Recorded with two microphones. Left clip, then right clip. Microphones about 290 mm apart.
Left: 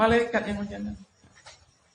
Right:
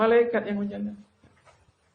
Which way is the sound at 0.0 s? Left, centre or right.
Left.